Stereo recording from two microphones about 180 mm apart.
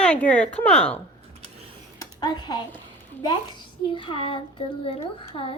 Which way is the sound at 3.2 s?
25° left (ahead or behind).